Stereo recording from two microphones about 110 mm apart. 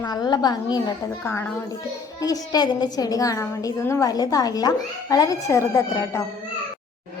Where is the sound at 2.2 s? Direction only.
35° left (ahead or behind).